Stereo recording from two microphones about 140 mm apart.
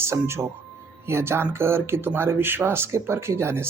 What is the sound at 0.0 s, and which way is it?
Speech, 20° right (ahead or behind).